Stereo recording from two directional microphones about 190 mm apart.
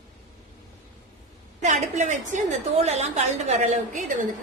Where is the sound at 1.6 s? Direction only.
40° right (ahead or behind).